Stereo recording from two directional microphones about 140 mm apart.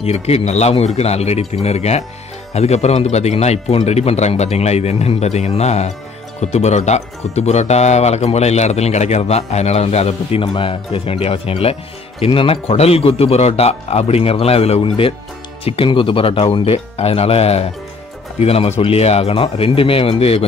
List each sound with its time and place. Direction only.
0.0 s speech: 50° left (ahead or behind)